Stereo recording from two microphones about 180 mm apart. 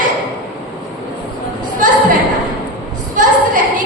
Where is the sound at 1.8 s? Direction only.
45° right (ahead or behind).